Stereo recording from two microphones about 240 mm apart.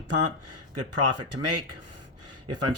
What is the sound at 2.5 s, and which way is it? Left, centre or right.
Speech, right.